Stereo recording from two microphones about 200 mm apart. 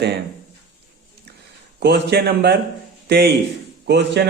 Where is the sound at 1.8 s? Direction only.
55° right (ahead or behind).